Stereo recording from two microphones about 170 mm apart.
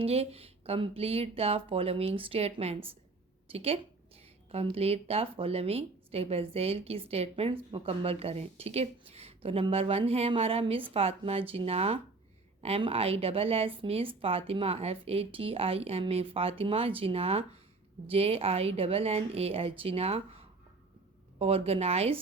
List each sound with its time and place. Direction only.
0.0 s speech: 35° right (ahead or behind)
21.3 s speech: 35° right (ahead or behind)